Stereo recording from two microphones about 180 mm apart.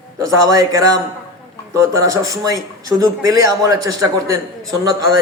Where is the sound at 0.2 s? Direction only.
20° right (ahead or behind).